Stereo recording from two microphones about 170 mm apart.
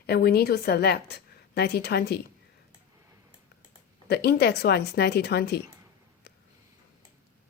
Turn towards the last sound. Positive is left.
turn(degrees=75)  # may be behind; listen again after turning